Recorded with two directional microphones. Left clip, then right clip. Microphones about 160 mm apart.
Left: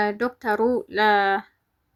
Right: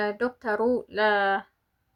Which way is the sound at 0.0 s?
25° left (ahead or behind).